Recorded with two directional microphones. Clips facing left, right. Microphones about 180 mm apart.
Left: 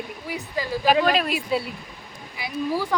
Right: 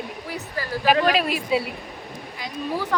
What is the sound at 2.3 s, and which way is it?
Speech, 10° left (ahead or behind).